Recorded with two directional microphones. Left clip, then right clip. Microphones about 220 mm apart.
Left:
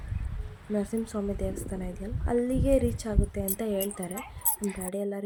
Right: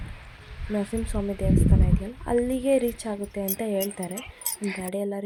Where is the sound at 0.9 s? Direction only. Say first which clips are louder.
Right 2 dB; 20° right (ahead or behind).